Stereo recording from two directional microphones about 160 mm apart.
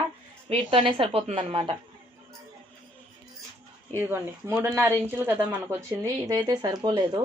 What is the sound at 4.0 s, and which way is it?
Speech, 15° right (ahead or behind).